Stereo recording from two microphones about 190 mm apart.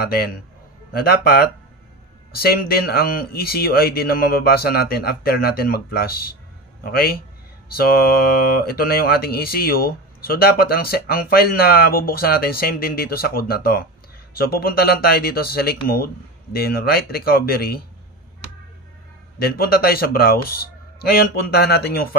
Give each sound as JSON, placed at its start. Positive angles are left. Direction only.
{"t": 0.0, "sound": "a man's voice", "side_deg": 55}
{"t": 19.3, "sound": "speech", "side_deg": 55}